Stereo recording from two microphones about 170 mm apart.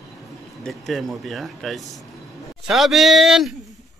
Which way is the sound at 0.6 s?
Centre (ahead or behind).